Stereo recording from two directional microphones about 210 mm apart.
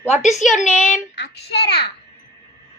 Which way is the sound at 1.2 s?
55° left (ahead or behind).